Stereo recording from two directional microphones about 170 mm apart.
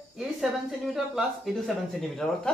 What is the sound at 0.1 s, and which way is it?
Speech, centre (ahead or behind).